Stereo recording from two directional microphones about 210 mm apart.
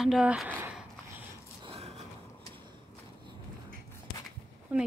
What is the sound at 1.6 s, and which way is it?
Gasp, 30° right (ahead or behind).